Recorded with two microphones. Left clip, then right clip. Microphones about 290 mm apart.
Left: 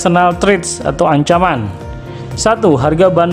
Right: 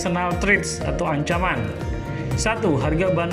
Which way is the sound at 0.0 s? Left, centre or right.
Centre.